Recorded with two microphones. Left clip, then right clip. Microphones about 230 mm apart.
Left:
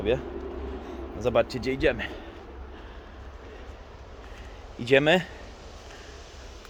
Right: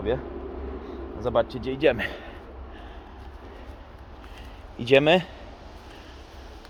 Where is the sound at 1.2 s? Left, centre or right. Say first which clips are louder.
Even; centre.